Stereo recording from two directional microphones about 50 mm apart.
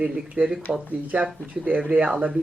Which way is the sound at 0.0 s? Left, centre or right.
Right.